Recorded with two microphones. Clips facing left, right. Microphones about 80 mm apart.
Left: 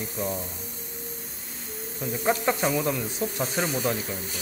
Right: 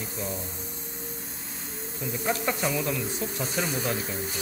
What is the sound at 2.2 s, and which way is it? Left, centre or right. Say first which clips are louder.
Speech: left 4 dB; left.